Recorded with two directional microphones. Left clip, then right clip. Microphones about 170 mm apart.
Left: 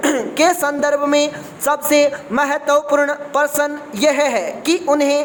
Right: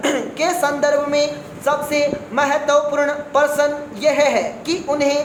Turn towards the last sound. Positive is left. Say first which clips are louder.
# left 3 dB
turn(degrees=45)  # may be behind; listen again after turning